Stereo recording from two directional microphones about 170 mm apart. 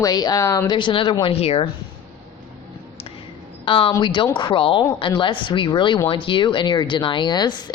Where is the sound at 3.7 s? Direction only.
30° left (ahead or behind).